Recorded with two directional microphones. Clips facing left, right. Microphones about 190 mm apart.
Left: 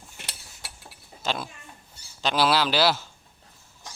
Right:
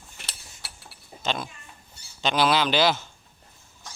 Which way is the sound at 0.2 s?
15° left (ahead or behind).